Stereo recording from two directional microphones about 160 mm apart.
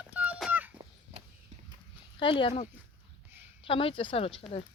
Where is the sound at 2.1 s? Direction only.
30° left (ahead or behind).